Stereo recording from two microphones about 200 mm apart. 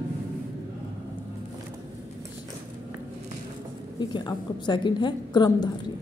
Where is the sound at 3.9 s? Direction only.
20° left (ahead or behind).